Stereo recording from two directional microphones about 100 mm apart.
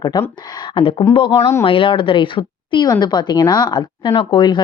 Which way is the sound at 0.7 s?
65° left (ahead or behind).